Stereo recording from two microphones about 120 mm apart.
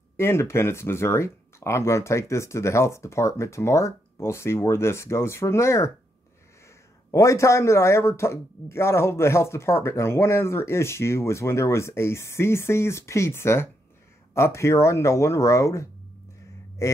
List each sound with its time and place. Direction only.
0.2 s speech: 20° left (ahead or behind)
7.1 s speech: 25° left (ahead or behind)